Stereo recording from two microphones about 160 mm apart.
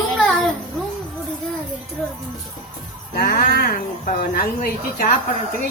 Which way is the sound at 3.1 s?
70° left (ahead or behind).